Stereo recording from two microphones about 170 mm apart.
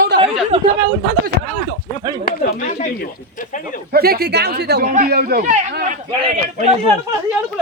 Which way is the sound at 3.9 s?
65° right (ahead or behind).